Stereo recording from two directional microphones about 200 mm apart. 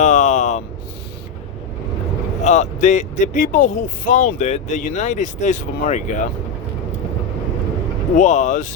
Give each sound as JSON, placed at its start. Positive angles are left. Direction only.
{"t": 0.0, "sound": "a sound", "side_deg": 35}
{"t": 2.4, "sound": "speech", "side_deg": 35}
{"t": 8.1, "sound": "speech", "side_deg": 35}